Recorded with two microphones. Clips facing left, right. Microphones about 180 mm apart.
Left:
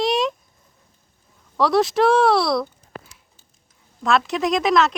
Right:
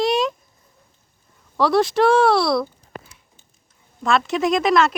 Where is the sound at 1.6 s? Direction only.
Centre (ahead or behind).